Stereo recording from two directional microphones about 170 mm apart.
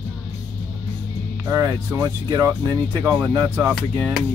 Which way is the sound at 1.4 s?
20° right (ahead or behind).